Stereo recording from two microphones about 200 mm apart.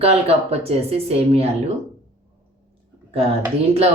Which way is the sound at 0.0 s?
30° right (ahead or behind).